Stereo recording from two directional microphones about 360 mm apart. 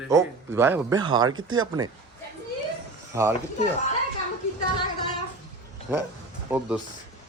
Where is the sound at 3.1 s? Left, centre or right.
Centre.